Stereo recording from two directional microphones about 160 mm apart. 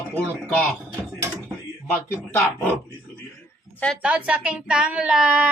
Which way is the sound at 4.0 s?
10° right (ahead or behind).